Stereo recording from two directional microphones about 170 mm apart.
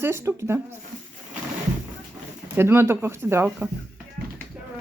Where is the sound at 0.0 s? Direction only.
15° right (ahead or behind).